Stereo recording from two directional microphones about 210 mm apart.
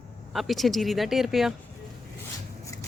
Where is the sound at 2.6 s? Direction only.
15° left (ahead or behind).